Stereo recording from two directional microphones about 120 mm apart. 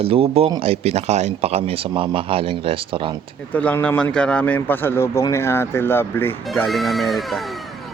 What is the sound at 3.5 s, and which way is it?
Speech, 10° left (ahead or behind).